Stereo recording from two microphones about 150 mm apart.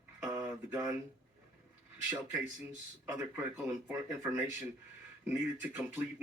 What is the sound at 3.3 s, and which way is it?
Speech, 15° right (ahead or behind).